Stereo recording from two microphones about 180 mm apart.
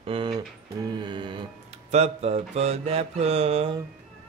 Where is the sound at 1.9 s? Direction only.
35° right (ahead or behind).